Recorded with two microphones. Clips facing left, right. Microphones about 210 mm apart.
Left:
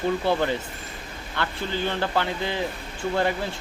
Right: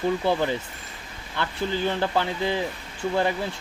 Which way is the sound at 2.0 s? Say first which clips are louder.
Right 1 dB; 15° right (ahead or behind).